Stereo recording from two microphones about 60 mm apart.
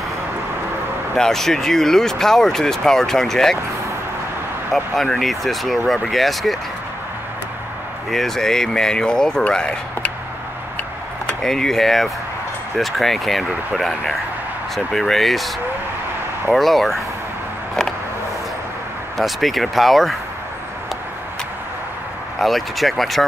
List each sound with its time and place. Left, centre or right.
1.1 s speech: centre
4.7 s speech: centre
8.1 s speech: centre
11.4 s speech: centre
16.5 s speech: centre
19.1 s speech: centre
22.4 s speech: centre